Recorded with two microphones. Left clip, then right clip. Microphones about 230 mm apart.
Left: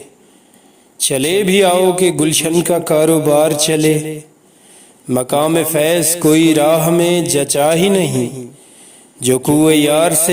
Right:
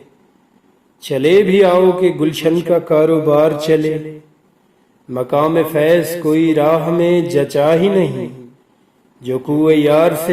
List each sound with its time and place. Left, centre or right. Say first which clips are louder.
0.9 s a man's voice: right 3 dB; left
5.0 s a man's voice: left 1 dB; left